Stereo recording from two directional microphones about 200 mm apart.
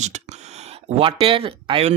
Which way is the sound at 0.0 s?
35° right (ahead or behind).